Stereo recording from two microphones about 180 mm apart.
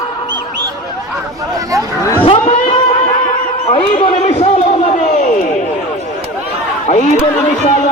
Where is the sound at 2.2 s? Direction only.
35° left (ahead or behind).